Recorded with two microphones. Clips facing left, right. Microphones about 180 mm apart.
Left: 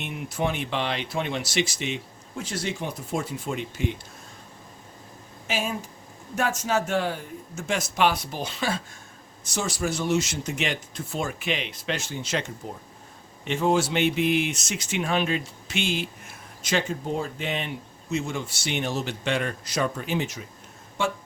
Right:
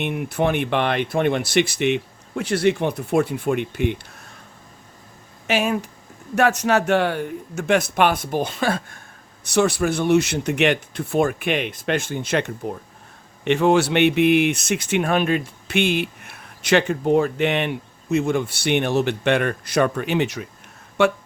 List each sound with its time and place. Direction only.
0.0 s speech: 60° right (ahead or behind)
5.5 s speech: 70° right (ahead or behind)
13.4 s speech: 70° right (ahead or behind)